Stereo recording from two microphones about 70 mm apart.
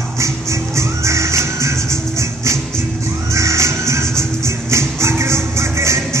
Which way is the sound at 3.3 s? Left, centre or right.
Right.